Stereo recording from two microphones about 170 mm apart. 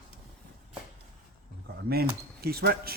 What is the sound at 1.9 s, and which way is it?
Speech, 65° right (ahead or behind).